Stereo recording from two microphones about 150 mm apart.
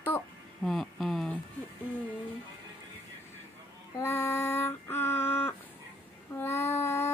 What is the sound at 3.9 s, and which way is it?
Female singing, 15° left (ahead or behind).